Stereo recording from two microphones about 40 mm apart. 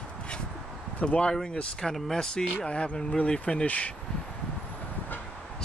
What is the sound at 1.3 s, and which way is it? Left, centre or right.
Speech, centre.